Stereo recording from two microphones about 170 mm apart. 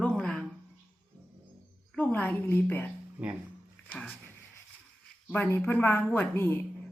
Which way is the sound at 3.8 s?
10° left (ahead or behind).